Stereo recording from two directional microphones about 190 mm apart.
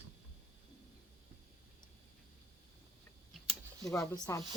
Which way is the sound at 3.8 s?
15° left (ahead or behind).